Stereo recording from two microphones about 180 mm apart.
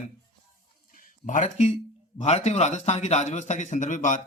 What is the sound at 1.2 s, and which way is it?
A man's voice, 45° left (ahead or behind).